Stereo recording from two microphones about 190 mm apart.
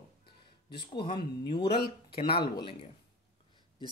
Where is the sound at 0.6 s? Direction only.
55° left (ahead or behind).